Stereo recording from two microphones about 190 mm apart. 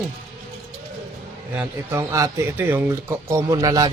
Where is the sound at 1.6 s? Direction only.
15° right (ahead or behind).